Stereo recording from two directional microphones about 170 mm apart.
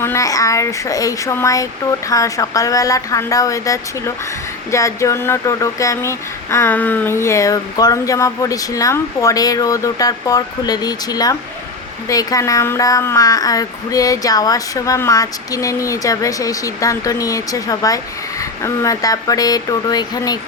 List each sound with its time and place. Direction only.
0.0 s speech: 15° left (ahead or behind)